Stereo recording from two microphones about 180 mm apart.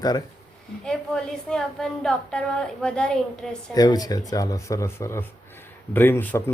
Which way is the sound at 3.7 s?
20° left (ahead or behind).